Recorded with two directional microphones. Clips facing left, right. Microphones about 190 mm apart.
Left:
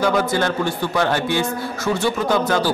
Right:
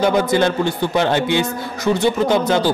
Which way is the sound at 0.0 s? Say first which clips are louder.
Right 3 dB; 20° right (ahead or behind).